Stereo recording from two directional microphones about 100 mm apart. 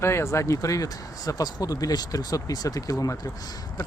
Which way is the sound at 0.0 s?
25° left (ahead or behind).